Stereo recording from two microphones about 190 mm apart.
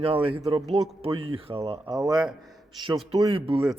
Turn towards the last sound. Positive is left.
turn(degrees=-30)  # may be behind; listen again after turning